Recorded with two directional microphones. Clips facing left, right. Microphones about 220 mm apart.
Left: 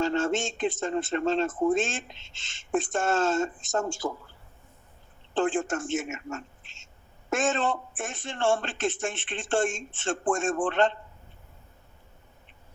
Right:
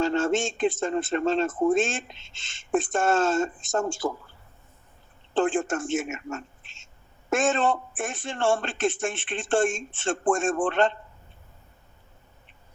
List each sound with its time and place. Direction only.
0.0 s speech: 50° right (ahead or behind)
5.4 s speech: 50° right (ahead or behind)